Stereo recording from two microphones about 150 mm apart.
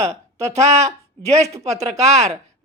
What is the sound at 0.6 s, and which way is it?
Speech, 45° right (ahead or behind).